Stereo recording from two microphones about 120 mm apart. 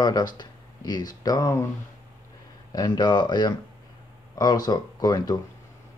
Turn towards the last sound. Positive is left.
turn(degrees=35)  # may be behind; listen again after turning